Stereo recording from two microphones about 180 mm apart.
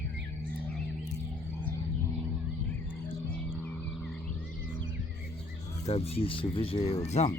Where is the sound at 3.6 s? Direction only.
5° left (ahead or behind).